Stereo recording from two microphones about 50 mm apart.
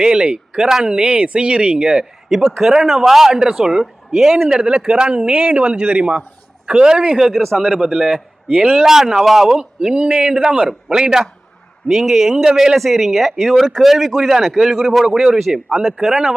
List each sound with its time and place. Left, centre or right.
0.0 s speech: centre
2.8 s a man's voice: centre
4.9 s a man's voice: centre
7.2 s a man's voice: centre
7.4 s speech: centre
7.7 s speech: centre
8.4 s speech: right
8.8 s a man's voice: centre